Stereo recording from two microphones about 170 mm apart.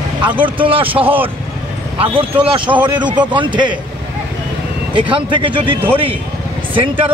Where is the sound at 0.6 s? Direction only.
30° right (ahead or behind).